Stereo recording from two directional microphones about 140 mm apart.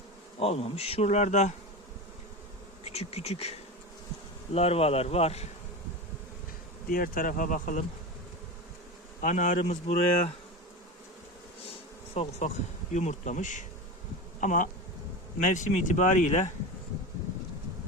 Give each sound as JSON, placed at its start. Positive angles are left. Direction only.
{"t": 0.3, "sound": "bee", "side_deg": 45}
{"t": 2.8, "sound": "bee", "side_deg": 50}
{"t": 4.5, "sound": "bee", "side_deg": 45}
{"t": 6.9, "sound": "speech", "side_deg": 85}
{"t": 9.2, "sound": "speech", "side_deg": 65}
{"t": 9.8, "sound": "bee", "side_deg": 45}
{"t": 12.1, "sound": "bee", "side_deg": 50}
{"t": 12.9, "sound": "speech", "side_deg": 55}